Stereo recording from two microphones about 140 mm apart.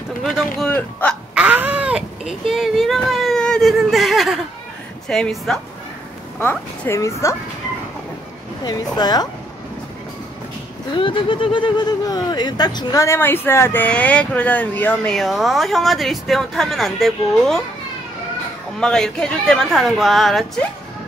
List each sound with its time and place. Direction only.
0.2 s speech: centre (ahead or behind)
1.3 s speech: 10° right (ahead or behind)
6.4 s a woman's voice: 15° left (ahead or behind)
8.6 s a woman's voice: 30° left (ahead or behind)
11.0 s speech: 40° left (ahead or behind); by 17.6 s centre (ahead or behind)
18.8 s speech: 5° left (ahead or behind)